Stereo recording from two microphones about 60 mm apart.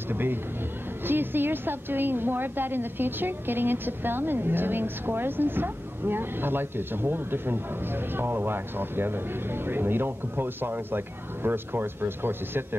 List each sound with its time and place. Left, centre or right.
0.1 s a woman's voice: right